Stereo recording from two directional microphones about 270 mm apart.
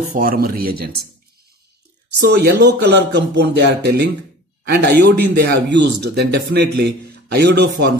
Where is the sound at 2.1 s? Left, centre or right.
Right.